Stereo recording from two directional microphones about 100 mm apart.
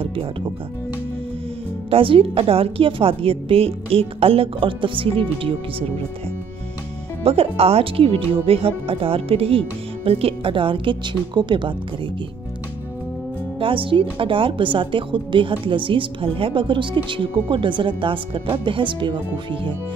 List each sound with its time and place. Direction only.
0.0 s music: 65° right (ahead or behind)
1.9 s a woman's voice: 65° right (ahead or behind)
7.2 s a woman's voice: 75° right (ahead or behind); by 11.7 s 50° right (ahead or behind)
13.6 s a woman's voice: 60° right (ahead or behind)